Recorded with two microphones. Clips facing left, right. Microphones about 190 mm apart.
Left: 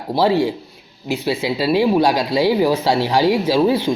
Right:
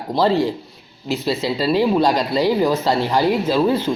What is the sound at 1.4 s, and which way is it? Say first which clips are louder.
Speech: left 1 dB; 5° left (ahead or behind).